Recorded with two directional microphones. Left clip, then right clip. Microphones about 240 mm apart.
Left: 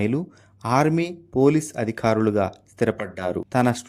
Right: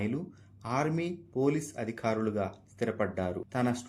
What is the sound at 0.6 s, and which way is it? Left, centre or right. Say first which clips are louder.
A man's voice: left 11 dB; left.